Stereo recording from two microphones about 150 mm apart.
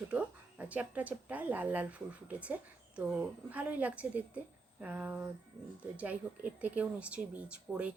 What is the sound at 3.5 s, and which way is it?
Speech, 10° right (ahead or behind).